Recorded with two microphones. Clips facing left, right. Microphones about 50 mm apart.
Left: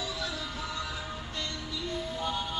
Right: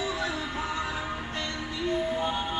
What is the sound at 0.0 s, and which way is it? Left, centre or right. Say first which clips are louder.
Music: right 5 dB; right.